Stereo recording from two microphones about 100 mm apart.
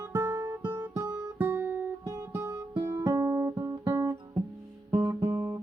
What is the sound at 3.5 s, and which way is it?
Music, 25° right (ahead or behind).